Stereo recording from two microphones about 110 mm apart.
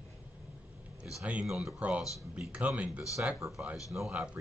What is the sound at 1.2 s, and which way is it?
Speech, 10° right (ahead or behind).